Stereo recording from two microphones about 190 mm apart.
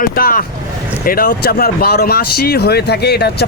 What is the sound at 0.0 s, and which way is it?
Speech, 50° left (ahead or behind).